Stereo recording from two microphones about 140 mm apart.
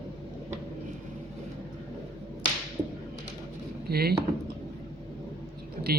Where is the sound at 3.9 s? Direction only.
90° right.